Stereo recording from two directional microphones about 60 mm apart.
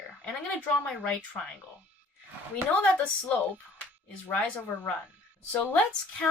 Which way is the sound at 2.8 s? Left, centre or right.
Centre.